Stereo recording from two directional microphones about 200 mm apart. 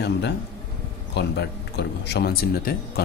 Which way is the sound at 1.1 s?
60° left (ahead or behind).